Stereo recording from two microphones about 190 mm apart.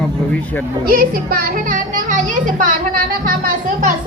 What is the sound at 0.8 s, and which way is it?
A child's voice, 50° right (ahead or behind).